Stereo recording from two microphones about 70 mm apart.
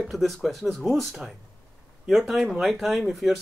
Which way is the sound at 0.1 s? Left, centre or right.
Centre.